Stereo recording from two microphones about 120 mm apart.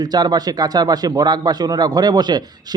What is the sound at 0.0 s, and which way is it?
A man's voice, 35° right (ahead or behind).